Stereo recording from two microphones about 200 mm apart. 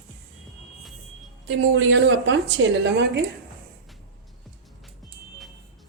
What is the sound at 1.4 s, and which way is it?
Speech, 70° right (ahead or behind).